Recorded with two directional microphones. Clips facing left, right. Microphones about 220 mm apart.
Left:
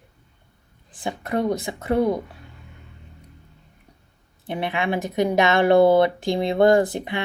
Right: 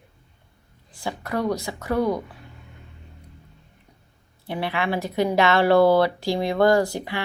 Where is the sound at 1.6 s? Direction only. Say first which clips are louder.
Left 2 dB; 20° left (ahead or behind).